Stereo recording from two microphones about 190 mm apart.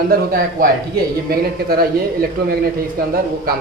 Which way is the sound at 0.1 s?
50° right (ahead or behind).